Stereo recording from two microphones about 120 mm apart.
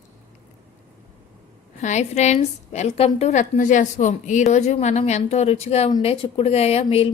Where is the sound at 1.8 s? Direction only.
80° left; by 3.3 s 60° left (ahead or behind).